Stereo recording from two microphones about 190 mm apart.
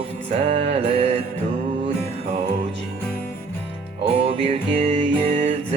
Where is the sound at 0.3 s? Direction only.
35° right (ahead or behind).